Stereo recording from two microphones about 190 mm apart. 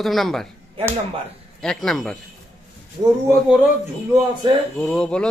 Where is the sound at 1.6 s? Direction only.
Centre (ahead or behind).